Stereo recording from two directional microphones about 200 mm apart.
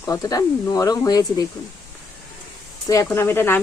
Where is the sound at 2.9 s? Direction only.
15° left (ahead or behind).